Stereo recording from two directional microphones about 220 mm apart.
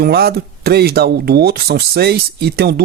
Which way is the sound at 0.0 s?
45° right (ahead or behind).